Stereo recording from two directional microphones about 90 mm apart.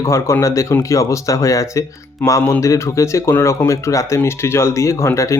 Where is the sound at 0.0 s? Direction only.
30° left (ahead or behind).